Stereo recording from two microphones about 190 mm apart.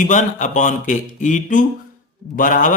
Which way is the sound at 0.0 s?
40° left (ahead or behind).